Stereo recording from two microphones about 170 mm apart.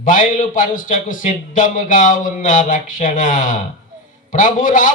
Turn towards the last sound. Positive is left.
turn(degrees=50)  # may be behind; listen again after turning